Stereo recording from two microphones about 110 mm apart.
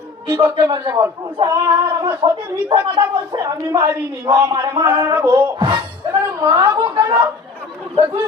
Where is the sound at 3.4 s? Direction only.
30° right (ahead or behind).